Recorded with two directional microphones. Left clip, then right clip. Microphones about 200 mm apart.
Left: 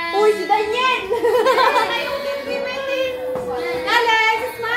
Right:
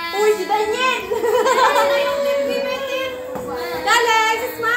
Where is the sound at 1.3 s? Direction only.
15° left (ahead or behind).